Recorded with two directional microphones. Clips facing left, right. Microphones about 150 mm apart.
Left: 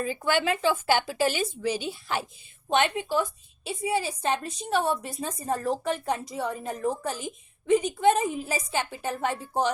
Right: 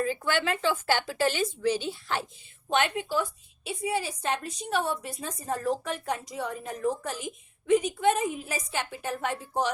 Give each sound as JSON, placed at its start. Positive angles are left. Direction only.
{"t": 0.0, "sound": "a woman's voice", "side_deg": 15}
{"t": 2.7, "sound": "a woman's voice", "side_deg": 25}